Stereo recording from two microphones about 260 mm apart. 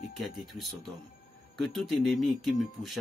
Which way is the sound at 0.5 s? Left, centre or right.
Centre.